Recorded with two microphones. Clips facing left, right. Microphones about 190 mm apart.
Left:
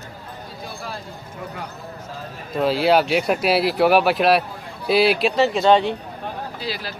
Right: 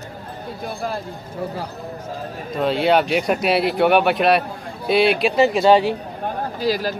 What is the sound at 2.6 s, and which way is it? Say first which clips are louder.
Speech: even; centre (ahead or behind).